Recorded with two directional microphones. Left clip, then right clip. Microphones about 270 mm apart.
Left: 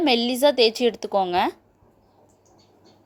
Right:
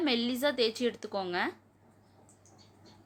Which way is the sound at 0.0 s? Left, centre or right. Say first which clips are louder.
Left 11 dB; left.